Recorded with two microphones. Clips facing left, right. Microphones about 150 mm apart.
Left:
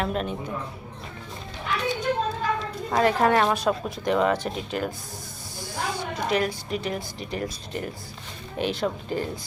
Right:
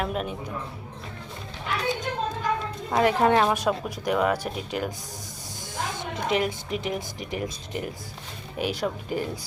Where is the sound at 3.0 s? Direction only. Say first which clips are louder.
Even; 15° right (ahead or behind).